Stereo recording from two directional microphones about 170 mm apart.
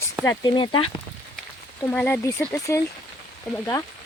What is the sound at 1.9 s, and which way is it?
Speech, 10° left (ahead or behind).